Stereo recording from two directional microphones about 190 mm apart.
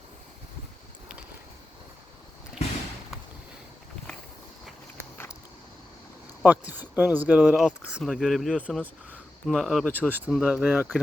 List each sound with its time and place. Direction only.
5.1 s a sound: 10° left (ahead or behind)
6.4 s speech: 10° right (ahead or behind)
10.1 s speech: 5° right (ahead or behind)